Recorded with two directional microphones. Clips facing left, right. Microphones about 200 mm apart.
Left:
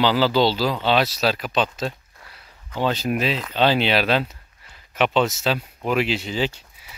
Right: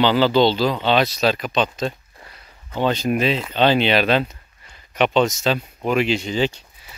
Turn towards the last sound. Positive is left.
turn(degrees=5)  # may be behind; listen again after turning